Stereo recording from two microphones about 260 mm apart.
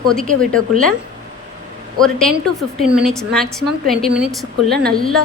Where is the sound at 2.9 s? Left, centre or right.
Centre.